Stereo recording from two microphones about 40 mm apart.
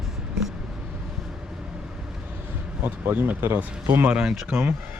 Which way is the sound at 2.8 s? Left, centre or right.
Right.